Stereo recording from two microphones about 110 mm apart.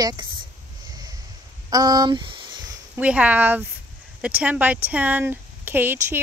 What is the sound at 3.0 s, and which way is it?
Speech, 10° right (ahead or behind).